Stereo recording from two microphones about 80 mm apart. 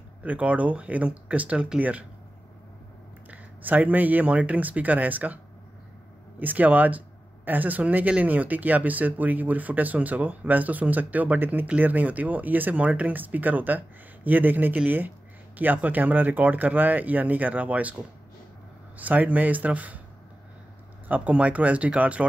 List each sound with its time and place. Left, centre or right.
0.2 s speech: centre
3.3 s speech: right
6.4 s speech: right
18.9 s speech: right
21.1 s speech: centre